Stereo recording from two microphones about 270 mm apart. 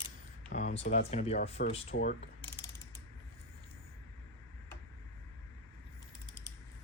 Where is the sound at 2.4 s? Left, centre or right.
Centre.